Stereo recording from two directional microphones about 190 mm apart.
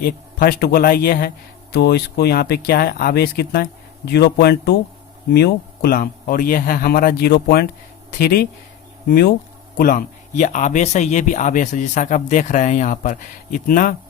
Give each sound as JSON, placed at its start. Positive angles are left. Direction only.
{"t": 0.0, "sound": "speech", "side_deg": 50}